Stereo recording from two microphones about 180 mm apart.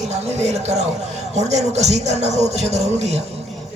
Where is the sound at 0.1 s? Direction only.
35° right (ahead or behind).